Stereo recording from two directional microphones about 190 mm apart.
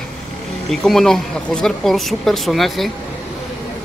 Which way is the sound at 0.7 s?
Centre (ahead or behind).